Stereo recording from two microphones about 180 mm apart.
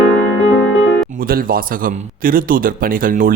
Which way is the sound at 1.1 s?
55° right (ahead or behind).